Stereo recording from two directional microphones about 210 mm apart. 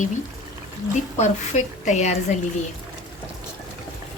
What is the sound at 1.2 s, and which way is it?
Speech, 35° left (ahead or behind).